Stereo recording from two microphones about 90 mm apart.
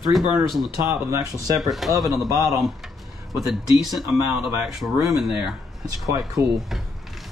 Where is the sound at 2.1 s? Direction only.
40° right (ahead or behind).